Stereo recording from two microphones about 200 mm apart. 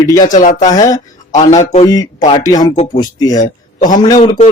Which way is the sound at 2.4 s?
20° left (ahead or behind).